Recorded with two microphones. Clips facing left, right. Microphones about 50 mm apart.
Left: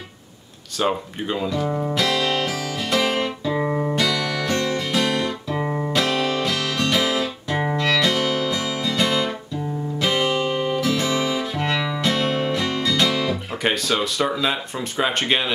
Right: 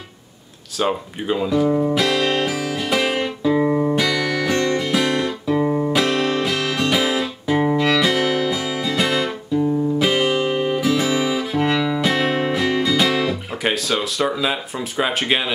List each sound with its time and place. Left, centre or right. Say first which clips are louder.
0.7 s guitar: right 1 dB; centre
3.9 s music: right 3 dB; centre
5.6 s music: right 6 dB; centre
5.9 s music: right 2 dB; centre